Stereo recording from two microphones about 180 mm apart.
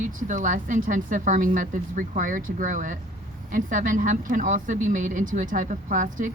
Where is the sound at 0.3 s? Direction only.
45° right (ahead or behind).